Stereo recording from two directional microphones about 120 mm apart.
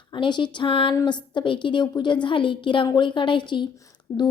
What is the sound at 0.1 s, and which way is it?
A woman's voice, 40° left (ahead or behind).